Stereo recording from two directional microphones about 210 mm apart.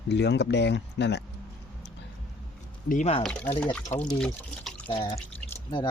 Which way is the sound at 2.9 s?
30° left (ahead or behind).